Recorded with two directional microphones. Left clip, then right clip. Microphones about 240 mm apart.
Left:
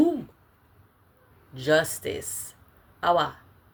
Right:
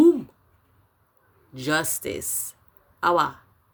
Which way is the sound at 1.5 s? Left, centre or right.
Right.